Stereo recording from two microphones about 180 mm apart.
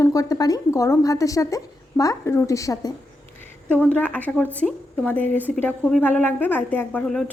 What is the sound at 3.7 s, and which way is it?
A woman's voice, 10° left (ahead or behind).